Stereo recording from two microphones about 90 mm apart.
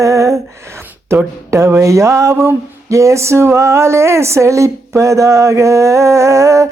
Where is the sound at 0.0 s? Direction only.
35° right (ahead or behind).